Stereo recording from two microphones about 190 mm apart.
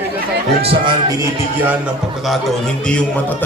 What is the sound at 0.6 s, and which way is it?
Speech, 30° right (ahead or behind).